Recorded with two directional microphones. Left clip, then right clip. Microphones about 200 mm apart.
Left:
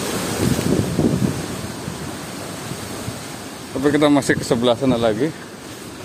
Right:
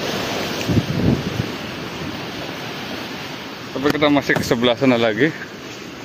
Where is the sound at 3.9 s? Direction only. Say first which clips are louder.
Even; 30° left (ahead or behind).